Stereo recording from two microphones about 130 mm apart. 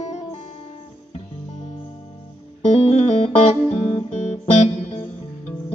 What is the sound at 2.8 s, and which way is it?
Music, 55° left (ahead or behind).